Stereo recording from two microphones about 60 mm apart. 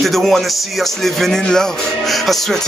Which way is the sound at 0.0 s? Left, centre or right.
Centre.